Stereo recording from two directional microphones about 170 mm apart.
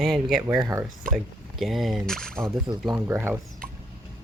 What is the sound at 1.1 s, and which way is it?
Speech, centre (ahead or behind).